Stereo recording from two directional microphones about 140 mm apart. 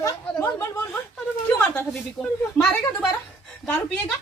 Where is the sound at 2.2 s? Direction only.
Centre (ahead or behind).